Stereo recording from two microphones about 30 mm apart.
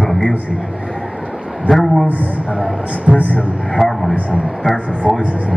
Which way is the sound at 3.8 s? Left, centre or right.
Centre.